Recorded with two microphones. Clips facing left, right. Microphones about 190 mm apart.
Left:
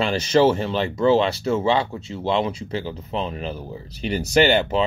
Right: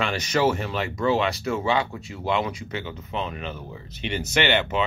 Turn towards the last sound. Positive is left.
turn(degrees=35)  # may be behind; listen again after turning